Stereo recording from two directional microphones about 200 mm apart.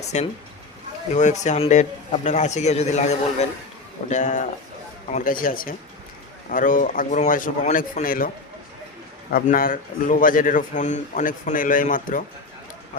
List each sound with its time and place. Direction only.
0.1 s a man's voice: 35° left (ahead or behind)
9.3 s a man's voice: 45° left (ahead or behind)